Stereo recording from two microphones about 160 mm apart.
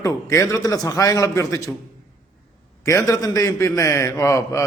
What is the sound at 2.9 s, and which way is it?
A man's voice, 20° left (ahead or behind).